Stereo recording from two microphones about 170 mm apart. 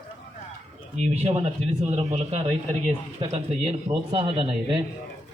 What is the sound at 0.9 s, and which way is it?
Speech, 40° right (ahead or behind).